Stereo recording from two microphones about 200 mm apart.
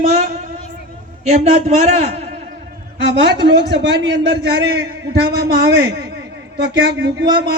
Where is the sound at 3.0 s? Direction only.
60° right (ahead or behind).